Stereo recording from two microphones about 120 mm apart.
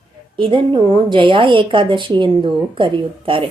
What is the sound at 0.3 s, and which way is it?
A woman's voice, 45° right (ahead or behind).